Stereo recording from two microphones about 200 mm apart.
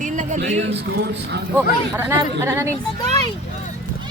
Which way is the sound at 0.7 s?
60° right (ahead or behind).